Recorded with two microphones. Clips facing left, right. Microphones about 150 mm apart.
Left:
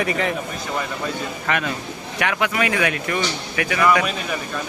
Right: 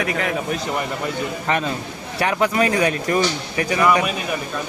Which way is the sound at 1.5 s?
30° right (ahead or behind).